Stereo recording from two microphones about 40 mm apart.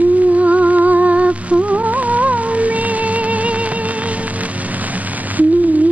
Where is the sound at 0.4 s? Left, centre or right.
Right.